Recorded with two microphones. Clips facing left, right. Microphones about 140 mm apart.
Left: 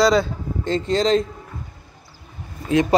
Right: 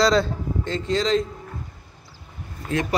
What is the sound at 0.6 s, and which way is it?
Speech, 25° left (ahead or behind).